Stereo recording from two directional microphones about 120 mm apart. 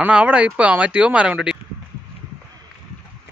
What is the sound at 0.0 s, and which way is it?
Speech, 10° right (ahead or behind).